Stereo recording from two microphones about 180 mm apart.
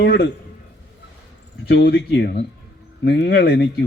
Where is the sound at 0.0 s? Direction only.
65° left (ahead or behind).